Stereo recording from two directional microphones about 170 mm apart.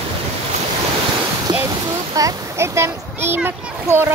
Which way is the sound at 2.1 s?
20° right (ahead or behind).